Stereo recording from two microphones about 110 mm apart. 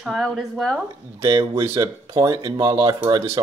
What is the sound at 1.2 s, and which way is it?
Speech, 50° right (ahead or behind).